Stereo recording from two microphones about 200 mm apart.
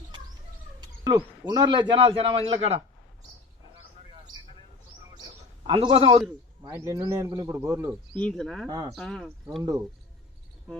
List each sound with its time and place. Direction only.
0.8 s a man's voice: 20° right (ahead or behind)
5.6 s a man's voice: 25° right (ahead or behind)
6.7 s speech: 15° right (ahead or behind)
8.1 s speech: 5° left (ahead or behind)